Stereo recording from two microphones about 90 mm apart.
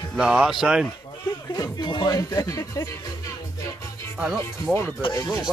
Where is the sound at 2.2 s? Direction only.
40° left (ahead or behind).